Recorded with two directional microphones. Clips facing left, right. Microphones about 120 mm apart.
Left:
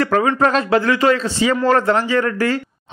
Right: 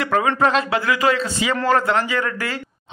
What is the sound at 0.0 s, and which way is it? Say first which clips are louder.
A man's voice: left 3 dB; 40° left (ahead or behind).